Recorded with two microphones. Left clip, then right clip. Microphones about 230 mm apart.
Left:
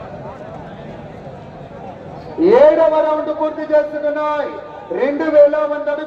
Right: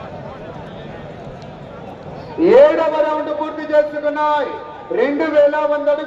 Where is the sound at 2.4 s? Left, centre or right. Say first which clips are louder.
Left 1 dB; right.